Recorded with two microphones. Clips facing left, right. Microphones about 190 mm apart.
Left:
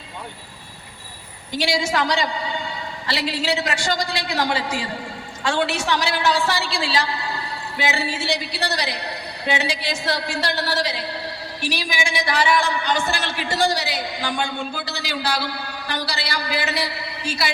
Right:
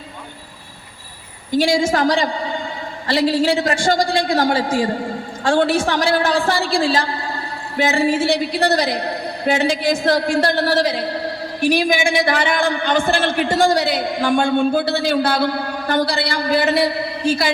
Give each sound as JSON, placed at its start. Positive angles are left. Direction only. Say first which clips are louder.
{"t": 1.5, "sound": "a man's voice", "louder": "right 6 dB", "side_deg": -50}